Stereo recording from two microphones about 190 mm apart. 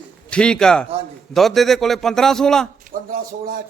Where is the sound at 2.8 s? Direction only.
45° right (ahead or behind).